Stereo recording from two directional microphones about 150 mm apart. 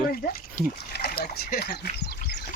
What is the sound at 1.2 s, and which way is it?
Speech, 85° left.